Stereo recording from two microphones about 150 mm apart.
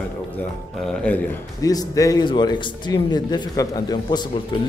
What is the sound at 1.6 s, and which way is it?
A man's voice, 25° left (ahead or behind).